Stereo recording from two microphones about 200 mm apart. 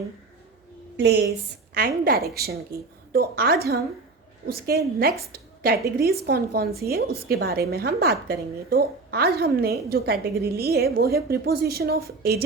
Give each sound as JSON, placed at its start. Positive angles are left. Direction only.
{"t": 0.9, "sound": "a woman's voice", "side_deg": -55}